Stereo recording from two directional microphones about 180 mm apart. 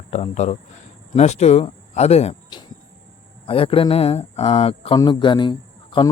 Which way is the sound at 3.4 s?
30° left (ahead or behind).